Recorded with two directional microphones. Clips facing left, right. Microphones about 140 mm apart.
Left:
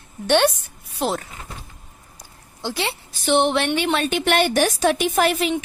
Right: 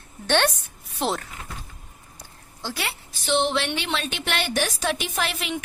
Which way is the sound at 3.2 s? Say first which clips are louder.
Left 5 dB; 55° left (ahead or behind).